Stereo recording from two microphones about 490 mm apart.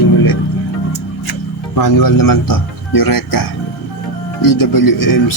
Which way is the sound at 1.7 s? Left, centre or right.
Left.